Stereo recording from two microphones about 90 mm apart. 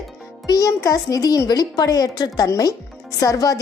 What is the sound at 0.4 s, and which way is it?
A woman's voice, 40° left (ahead or behind).